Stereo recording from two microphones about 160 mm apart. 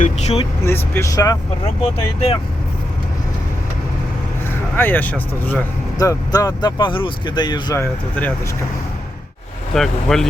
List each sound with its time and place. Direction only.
0.0 s vehicle: 45° left (ahead or behind)
0.6 s speech: 15° left (ahead or behind)
4.8 s speech: 10° left (ahead or behind)
6.0 s speech: 20° left (ahead or behind)
7.8 s speech: 10° left (ahead or behind)
9.7 s speech: centre (ahead or behind)